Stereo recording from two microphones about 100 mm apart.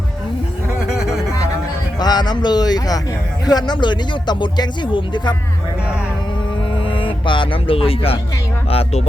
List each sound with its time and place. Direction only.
2.0 s speech: 45° left (ahead or behind)
6.7 s speech: 60° left (ahead or behind)
8.7 s music: 85° left